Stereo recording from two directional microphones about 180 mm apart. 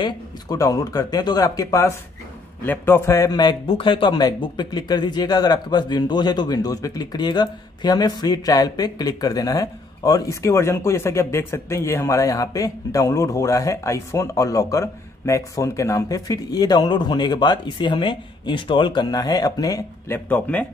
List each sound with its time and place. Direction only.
0.0 s a man's voice: 20° left (ahead or behind)
20.2 s speech: 10° left (ahead or behind)